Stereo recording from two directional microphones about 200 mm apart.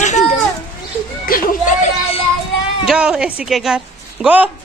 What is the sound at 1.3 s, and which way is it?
Speech, 35° left (ahead or behind).